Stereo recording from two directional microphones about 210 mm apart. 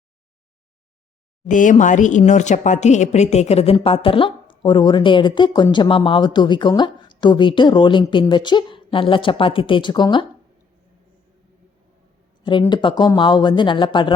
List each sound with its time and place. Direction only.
1.5 s speech: 35° left (ahead or behind); by 10.2 s 20° left (ahead or behind)
12.5 s speech: 20° left (ahead or behind)